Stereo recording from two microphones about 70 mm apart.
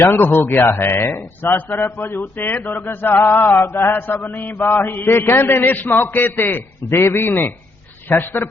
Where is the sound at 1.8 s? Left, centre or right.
Left.